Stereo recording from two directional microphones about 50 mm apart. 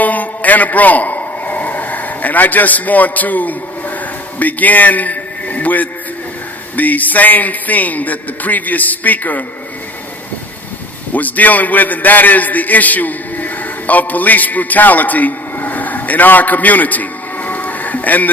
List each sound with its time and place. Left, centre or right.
0.0 s a sound: left
4.4 s a man's voice: left
11.1 s a man's voice: left